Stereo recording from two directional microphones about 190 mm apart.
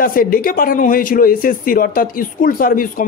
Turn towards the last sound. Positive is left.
turn(degrees=45)  # may be behind; listen again after turning